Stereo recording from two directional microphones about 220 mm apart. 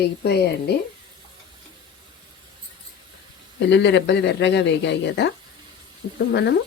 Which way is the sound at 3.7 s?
50° left (ahead or behind).